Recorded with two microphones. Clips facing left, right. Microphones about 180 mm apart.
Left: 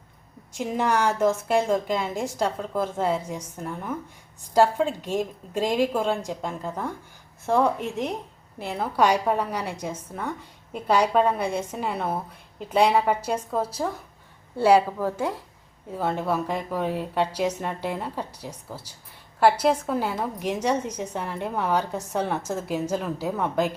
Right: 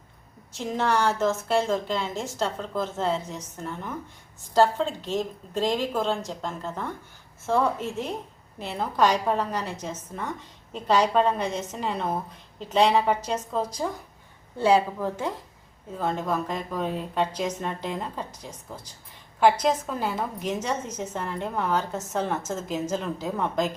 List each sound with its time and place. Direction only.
0.5 s a woman's voice: 10° left (ahead or behind)